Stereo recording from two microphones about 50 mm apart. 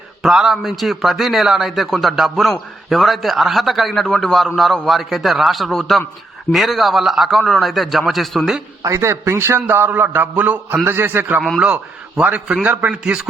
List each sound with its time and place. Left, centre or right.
0.2 s a man's voice: centre
8.9 s a man's voice: right
10.8 s a man's voice: right
11.6 s a man's voice: right